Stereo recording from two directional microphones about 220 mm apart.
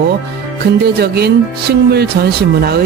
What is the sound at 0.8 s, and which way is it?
Speech, 45° right (ahead or behind).